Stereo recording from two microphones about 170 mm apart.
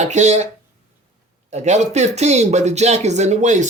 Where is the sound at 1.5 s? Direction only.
40° right (ahead or behind).